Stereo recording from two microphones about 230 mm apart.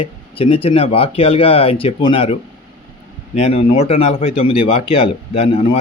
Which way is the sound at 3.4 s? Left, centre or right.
Left.